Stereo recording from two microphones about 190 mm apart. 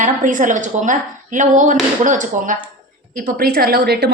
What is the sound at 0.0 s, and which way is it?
A woman's voice, 45° right (ahead or behind).